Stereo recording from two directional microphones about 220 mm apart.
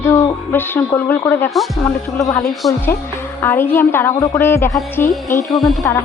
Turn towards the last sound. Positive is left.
turn(degrees=0)  # may be behind; listen again after turning